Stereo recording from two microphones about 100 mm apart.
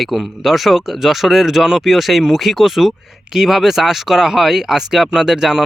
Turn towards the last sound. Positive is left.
turn(degrees=-5)  # may be behind; listen again after turning